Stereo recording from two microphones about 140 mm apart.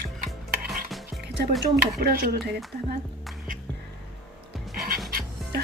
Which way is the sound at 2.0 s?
90° right.